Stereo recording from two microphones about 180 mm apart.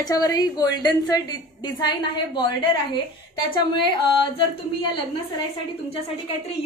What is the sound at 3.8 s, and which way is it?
Speech, 25° left (ahead or behind).